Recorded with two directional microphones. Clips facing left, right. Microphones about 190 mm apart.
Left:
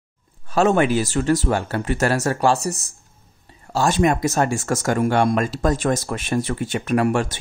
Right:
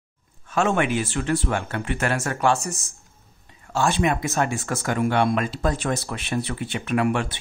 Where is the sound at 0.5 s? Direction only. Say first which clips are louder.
Left 5 dB; 35° left (ahead or behind).